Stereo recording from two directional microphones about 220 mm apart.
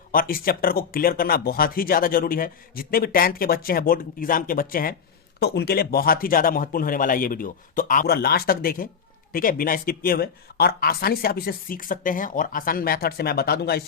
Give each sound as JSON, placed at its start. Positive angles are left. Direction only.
{"t": 0.1, "sound": "speech", "side_deg": 40}